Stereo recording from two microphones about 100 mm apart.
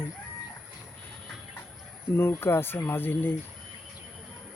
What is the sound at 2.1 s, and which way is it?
Speech, 25° left (ahead or behind).